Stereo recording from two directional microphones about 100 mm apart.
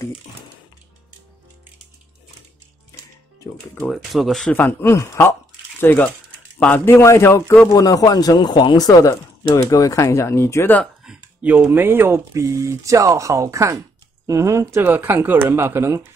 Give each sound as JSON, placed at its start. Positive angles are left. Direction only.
{"t": 3.9, "sound": "speech", "side_deg": 0}
{"t": 4.6, "sound": "speech", "side_deg": 20}
{"t": 11.1, "sound": "speech", "side_deg": -10}